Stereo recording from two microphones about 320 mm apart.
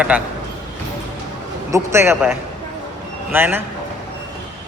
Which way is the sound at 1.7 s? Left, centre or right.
Centre.